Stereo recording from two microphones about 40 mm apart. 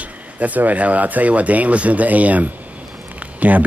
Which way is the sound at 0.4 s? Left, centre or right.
Right.